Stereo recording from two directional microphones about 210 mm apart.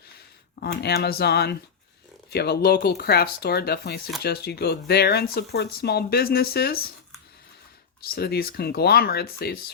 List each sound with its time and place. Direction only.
0.6 s speech: 50° left (ahead or behind)
8.0 s speech: 50° left (ahead or behind)